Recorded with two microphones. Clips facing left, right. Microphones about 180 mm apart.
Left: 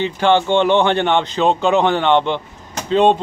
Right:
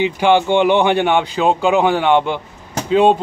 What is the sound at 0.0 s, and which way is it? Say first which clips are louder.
Speech: right 1 dB; 15° right (ahead or behind).